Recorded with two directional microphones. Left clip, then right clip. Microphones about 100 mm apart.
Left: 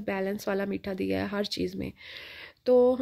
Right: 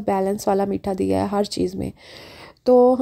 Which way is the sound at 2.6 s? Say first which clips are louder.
Right 7 dB; 55° right (ahead or behind).